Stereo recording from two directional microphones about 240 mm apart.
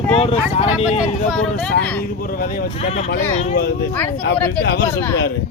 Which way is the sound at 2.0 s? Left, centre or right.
Left.